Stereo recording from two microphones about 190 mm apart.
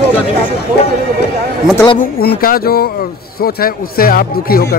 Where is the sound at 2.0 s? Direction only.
50° left (ahead or behind).